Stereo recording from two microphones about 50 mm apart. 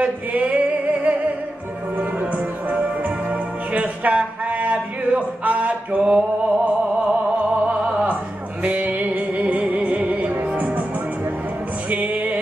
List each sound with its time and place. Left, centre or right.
0.0 s male singing: right
2.0 s music: right
11.9 s music: right